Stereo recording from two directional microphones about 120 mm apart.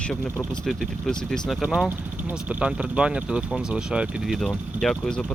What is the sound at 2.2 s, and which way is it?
Speech, 15° right (ahead or behind).